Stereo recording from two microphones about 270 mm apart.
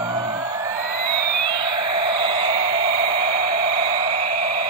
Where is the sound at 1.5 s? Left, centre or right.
Centre.